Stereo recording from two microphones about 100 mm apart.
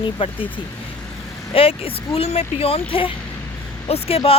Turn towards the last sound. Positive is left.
turn(degrees=75)  # may be behind; listen again after turning